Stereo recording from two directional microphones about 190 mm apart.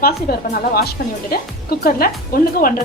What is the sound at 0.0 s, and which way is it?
Speech, 50° left (ahead or behind).